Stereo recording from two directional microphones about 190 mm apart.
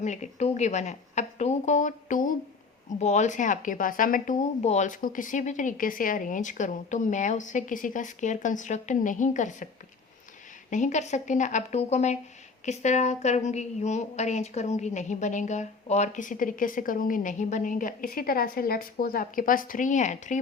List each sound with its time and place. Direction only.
0.0 s a woman's voice: 40° left (ahead or behind)
10.7 s a woman's voice: 40° left (ahead or behind)